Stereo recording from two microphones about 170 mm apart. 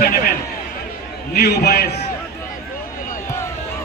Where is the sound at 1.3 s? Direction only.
70° left (ahead or behind).